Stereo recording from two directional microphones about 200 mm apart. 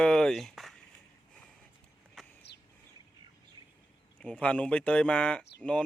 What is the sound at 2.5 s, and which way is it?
Bird, 55° left (ahead or behind).